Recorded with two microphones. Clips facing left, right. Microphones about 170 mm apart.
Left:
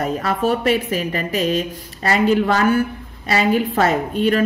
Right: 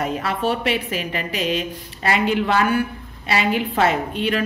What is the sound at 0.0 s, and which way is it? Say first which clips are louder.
A woman's voice: left 3 dB; 40° left (ahead or behind).